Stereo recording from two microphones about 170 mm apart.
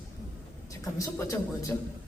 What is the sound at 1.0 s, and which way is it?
Speech, 20° left (ahead or behind).